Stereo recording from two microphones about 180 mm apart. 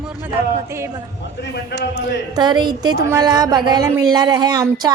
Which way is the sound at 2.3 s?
25° right (ahead or behind).